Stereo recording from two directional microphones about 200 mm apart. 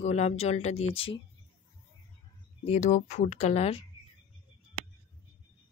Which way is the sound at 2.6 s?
35° left (ahead or behind).